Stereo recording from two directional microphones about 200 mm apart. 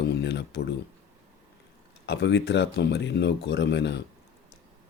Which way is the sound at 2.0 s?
60° left (ahead or behind).